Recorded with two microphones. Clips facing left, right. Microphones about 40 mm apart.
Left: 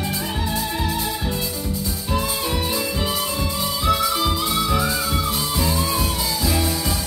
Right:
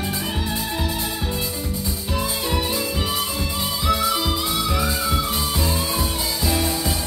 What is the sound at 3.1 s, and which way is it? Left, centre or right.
Music, right.